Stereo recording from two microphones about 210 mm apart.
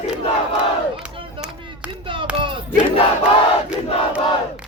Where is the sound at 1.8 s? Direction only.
5° right (ahead or behind).